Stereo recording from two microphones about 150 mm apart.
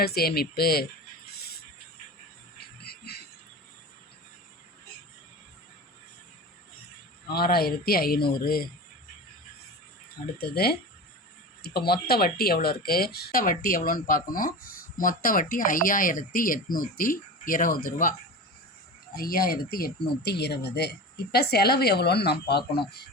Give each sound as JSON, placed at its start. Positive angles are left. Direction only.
{"t": 0.0, "sound": "speech", "side_deg": 90}
{"t": 2.8, "sound": "a sound", "side_deg": 90}
{"t": 7.3, "sound": "speech", "side_deg": 90}
{"t": 10.4, "sound": "speech", "side_deg": 90}
{"t": 19.1, "sound": "speech", "side_deg": 80}
{"t": 19.7, "sound": "speech", "side_deg": 90}